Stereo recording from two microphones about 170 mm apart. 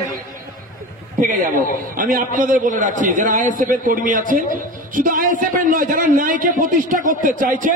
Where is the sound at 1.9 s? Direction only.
50° right (ahead or behind).